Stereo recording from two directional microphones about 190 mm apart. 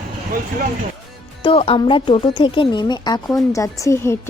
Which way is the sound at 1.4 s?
30° left (ahead or behind).